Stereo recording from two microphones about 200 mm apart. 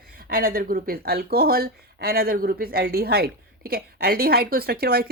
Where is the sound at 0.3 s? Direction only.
45° right (ahead or behind).